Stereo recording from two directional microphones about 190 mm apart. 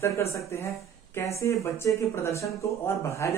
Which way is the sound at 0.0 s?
15° left (ahead or behind).